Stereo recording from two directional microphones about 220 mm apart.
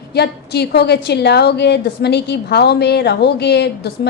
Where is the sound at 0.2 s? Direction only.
50° left (ahead or behind).